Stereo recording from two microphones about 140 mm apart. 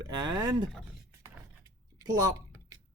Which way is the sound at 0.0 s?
30° right (ahead or behind).